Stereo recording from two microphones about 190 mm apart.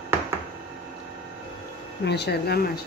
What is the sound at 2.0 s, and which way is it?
Speech, 60° left (ahead or behind).